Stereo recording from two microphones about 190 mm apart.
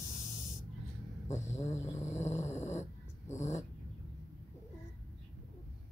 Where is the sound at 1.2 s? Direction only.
15° left (ahead or behind).